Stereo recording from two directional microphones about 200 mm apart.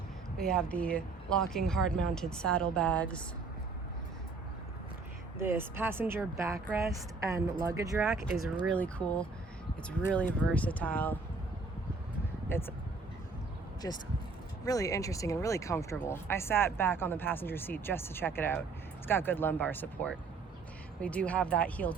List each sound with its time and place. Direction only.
0.3 s speech: 5° left (ahead or behind)
5.4 s speech: 10° right (ahead or behind)
8.6 s speech: 5° left (ahead or behind)
12.5 s speech: 10° left (ahead or behind)
13.8 s speech: 15° left (ahead or behind)